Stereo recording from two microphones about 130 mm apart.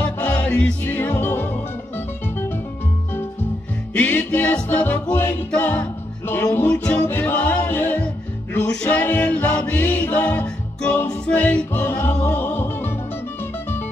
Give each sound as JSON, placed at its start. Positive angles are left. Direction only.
{"t": 0.0, "sound": "music", "side_deg": 10}
{"t": 3.9, "sound": "music", "side_deg": 15}